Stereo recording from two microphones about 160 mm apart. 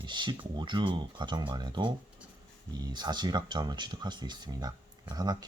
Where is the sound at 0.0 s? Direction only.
30° right (ahead or behind).